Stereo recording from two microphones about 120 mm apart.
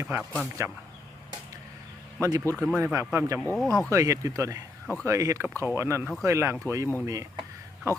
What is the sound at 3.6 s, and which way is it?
Speech, 5° left (ahead or behind).